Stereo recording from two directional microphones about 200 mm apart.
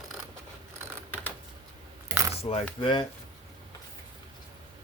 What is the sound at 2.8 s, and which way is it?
Speech, 25° left (ahead or behind).